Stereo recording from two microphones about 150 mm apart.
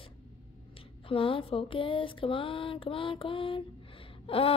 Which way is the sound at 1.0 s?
35° left (ahead or behind).